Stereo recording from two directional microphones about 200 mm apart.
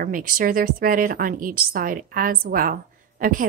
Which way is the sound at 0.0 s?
45° right (ahead or behind).